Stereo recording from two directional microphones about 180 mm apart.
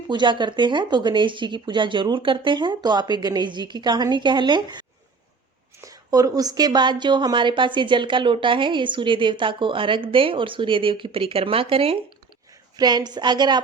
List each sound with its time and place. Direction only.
0.1 s a woman's voice: 25° right (ahead or behind)